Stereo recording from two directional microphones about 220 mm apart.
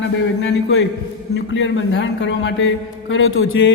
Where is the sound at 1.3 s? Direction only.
55° left (ahead or behind).